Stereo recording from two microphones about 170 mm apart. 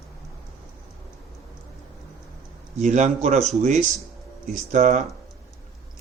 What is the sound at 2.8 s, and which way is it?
Speech, 45° right (ahead or behind).